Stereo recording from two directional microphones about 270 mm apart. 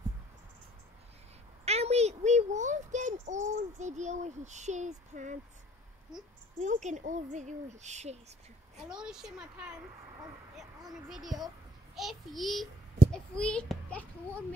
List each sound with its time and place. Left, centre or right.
1.6 s a sound: right
6.6 s speech: right
8.8 s a child's voice: centre
11.1 s a child's voice: centre